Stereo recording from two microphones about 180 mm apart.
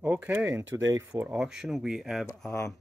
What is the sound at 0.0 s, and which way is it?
Speech, 10° right (ahead or behind).